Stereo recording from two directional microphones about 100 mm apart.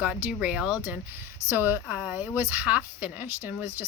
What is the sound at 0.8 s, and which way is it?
Speech, 20° right (ahead or behind).